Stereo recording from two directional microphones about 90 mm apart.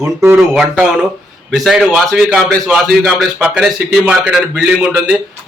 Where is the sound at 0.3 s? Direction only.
5° right (ahead or behind).